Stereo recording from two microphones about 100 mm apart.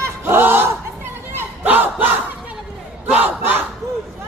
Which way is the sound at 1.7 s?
20° right (ahead or behind).